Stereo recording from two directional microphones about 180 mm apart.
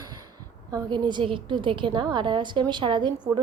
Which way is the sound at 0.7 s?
25° right (ahead or behind).